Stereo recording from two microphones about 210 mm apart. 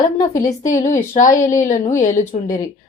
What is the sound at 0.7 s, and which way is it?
A woman's voice, 35° left (ahead or behind).